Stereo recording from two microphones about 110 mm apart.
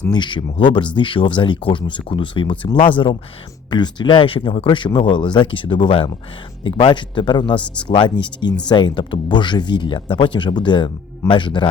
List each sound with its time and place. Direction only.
0.1 s speech: 45° left (ahead or behind)
3.7 s speech: 45° left (ahead or behind)